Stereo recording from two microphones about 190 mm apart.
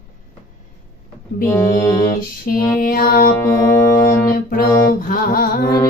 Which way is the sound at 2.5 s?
50° left (ahead or behind).